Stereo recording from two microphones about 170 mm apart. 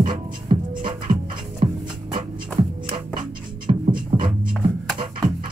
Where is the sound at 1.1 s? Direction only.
55° right (ahead or behind).